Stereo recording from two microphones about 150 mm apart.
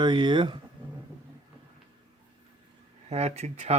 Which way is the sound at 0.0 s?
30° right (ahead or behind).